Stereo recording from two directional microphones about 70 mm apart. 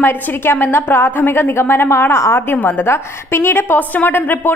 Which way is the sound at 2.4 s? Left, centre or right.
Left.